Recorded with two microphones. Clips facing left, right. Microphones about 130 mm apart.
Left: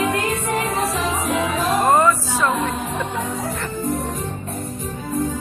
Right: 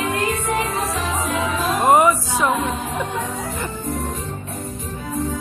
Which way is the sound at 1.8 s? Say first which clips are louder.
Right 3 dB; 15° right (ahead or behind).